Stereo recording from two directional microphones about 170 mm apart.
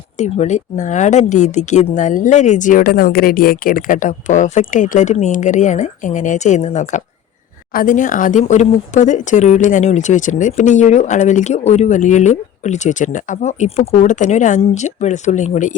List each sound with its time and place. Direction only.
0.2 s speech: 40° left (ahead or behind)
7.7 s speech: 55° left (ahead or behind)